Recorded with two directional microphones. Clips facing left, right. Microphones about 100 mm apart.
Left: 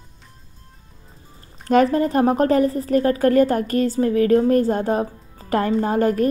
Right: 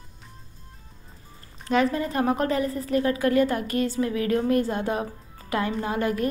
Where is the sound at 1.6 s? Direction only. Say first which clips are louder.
Left 7 dB; 45° left (ahead or behind).